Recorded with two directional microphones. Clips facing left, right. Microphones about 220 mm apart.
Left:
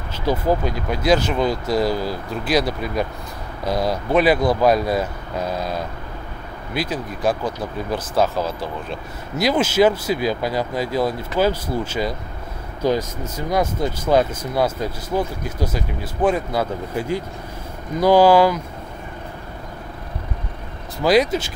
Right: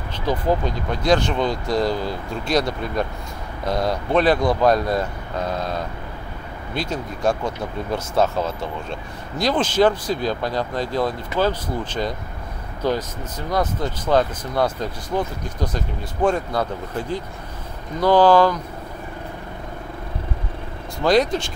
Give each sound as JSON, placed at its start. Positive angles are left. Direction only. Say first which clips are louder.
{"t": 0.3, "sound": "speech", "louder": "left 1 dB", "side_deg": 10}
{"t": 21.0, "sound": "speech", "louder": "left 1 dB", "side_deg": 5}